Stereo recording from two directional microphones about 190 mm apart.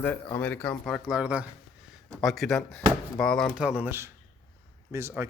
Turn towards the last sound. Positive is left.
turn(degrees=-10)  # may be behind; listen again after turning